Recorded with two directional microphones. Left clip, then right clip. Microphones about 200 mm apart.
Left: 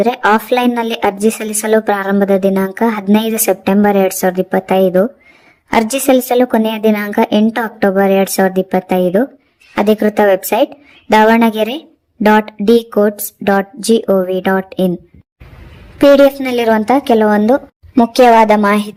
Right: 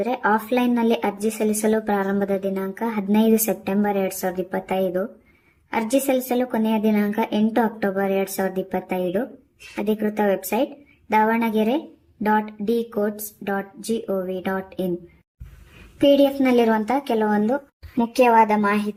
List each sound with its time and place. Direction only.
0.0 s a woman's voice: 40° left (ahead or behind)
16.0 s a woman's voice: 35° left (ahead or behind)